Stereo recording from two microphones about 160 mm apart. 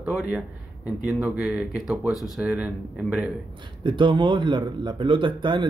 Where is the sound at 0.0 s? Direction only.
5° right (ahead or behind).